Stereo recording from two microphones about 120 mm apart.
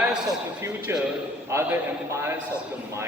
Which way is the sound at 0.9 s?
20° right (ahead or behind).